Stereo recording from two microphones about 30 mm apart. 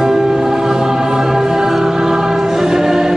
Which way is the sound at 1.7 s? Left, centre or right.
Centre.